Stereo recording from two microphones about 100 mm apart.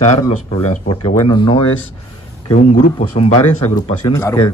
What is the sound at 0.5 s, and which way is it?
Speech, 60° left (ahead or behind).